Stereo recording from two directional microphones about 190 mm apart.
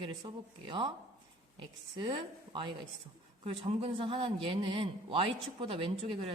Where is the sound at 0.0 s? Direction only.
25° right (ahead or behind).